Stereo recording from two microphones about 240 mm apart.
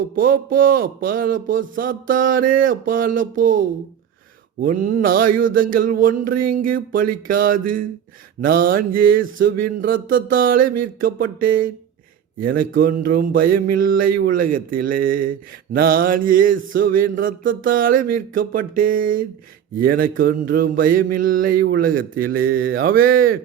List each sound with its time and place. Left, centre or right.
0.2 s speech: right